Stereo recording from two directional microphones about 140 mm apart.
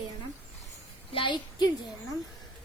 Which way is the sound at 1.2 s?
35° left (ahead or behind).